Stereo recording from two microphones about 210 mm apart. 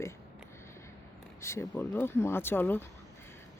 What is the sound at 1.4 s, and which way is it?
Speech, 10° left (ahead or behind).